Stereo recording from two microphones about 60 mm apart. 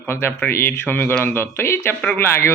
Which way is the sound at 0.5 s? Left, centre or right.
Left.